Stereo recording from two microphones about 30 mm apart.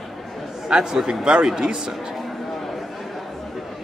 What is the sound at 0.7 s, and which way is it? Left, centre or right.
Speech, centre.